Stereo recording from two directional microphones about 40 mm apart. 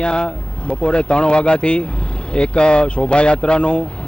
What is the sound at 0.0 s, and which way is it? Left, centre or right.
Speech, left.